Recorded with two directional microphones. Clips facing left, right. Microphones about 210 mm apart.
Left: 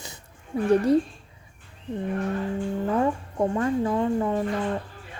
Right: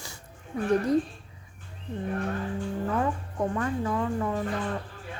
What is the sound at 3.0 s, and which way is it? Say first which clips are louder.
Speech: left 4 dB; 30° left (ahead or behind).